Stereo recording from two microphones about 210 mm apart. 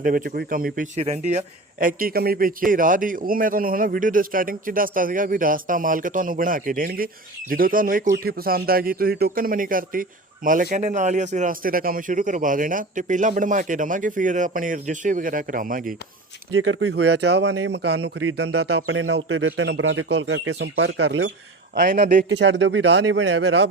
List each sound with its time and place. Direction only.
0.0 s speech: 40° right (ahead or behind)
16.5 s speech: 75° right (ahead or behind)
16.9 s a man's voice: 55° right (ahead or behind)
18.0 s speech: 90° right
18.3 s a man's voice: 50° right (ahead or behind)
21.8 s speech: 40° right (ahead or behind)
22.3 s a man's voice: 60° right (ahead or behind)